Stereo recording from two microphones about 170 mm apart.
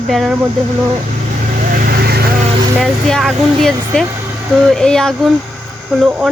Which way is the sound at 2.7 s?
Centre (ahead or behind).